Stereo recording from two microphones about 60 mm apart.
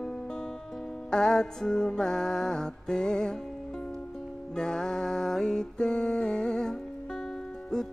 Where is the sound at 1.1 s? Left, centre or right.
Centre.